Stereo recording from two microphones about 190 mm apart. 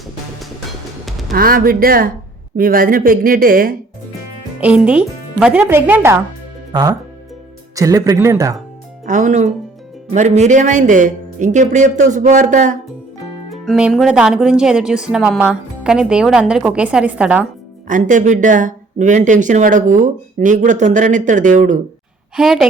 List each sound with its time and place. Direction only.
1.3 s speech: 50° right (ahead or behind)
4.6 s speech: 5° right (ahead or behind)
7.8 s speech: 20° right (ahead or behind)
9.0 s speech: 40° right (ahead or behind)
13.5 s speech: centre (ahead or behind)
17.8 s speech: 40° right (ahead or behind)
22.4 s speech: centre (ahead or behind)